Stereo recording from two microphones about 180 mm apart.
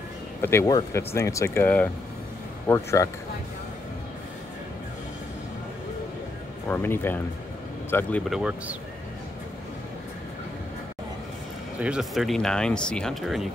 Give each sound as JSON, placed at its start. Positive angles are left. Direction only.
{"t": 0.4, "sound": "speech", "side_deg": 15}
{"t": 6.7, "sound": "speech", "side_deg": 10}
{"t": 8.3, "sound": "speech", "side_deg": -5}
{"t": 11.8, "sound": "speech", "side_deg": -5}